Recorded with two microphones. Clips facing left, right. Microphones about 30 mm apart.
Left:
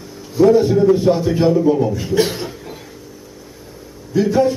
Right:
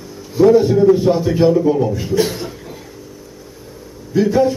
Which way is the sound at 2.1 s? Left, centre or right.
Centre.